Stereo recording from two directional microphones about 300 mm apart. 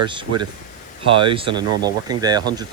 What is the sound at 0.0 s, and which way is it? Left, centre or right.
Speech, centre.